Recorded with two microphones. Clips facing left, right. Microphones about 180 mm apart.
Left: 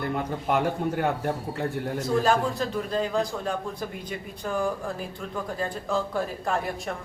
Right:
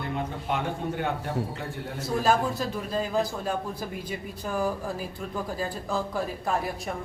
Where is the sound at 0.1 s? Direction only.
50° left (ahead or behind).